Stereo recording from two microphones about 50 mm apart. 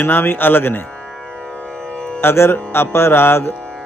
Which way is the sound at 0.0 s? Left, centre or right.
Left.